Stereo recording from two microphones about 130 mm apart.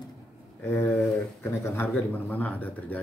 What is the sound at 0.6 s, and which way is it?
Speech, 15° left (ahead or behind).